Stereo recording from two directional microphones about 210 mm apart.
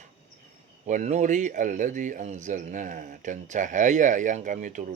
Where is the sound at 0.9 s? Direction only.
35° right (ahead or behind).